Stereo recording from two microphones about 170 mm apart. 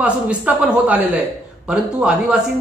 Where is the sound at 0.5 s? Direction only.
10° right (ahead or behind).